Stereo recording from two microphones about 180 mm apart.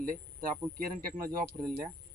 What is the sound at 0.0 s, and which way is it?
Speech, 50° right (ahead or behind).